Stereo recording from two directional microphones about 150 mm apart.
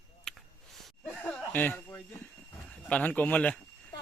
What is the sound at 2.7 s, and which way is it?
Speech, 10° left (ahead or behind).